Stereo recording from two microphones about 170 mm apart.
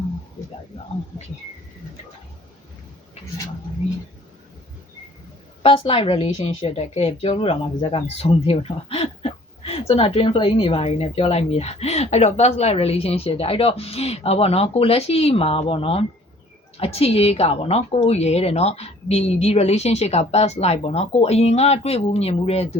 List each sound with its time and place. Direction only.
5.6 s a woman's voice: 35° left (ahead or behind)